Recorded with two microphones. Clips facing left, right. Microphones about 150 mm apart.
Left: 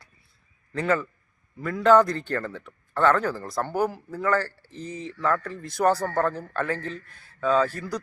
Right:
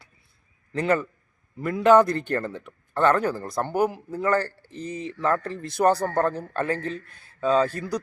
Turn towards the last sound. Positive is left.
turn(degrees=-20)  # may be behind; listen again after turning